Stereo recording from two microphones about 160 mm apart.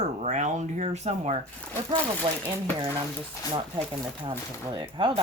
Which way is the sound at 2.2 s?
30° right (ahead or behind).